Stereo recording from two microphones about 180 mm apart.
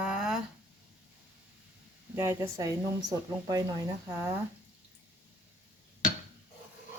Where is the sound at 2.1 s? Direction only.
15° right (ahead or behind).